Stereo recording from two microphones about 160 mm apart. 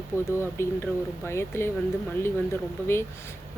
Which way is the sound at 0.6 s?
15° left (ahead or behind).